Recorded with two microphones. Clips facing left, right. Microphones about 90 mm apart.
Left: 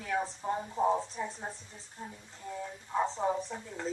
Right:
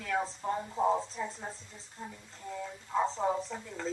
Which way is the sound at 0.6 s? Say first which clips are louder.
Even; centre (ahead or behind).